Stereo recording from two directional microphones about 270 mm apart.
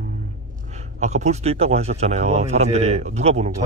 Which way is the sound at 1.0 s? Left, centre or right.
Right.